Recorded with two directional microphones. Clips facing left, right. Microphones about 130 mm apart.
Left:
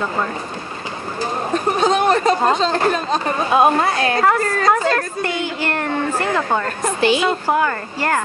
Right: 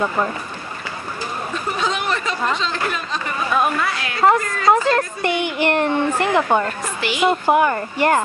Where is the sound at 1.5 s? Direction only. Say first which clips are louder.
Left 7 dB; 45° left (ahead or behind).